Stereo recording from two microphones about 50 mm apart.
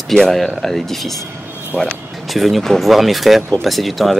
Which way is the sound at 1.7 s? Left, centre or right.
Left.